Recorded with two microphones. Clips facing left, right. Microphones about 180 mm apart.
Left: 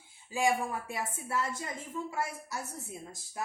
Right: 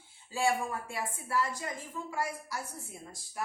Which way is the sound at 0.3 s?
15° left (ahead or behind).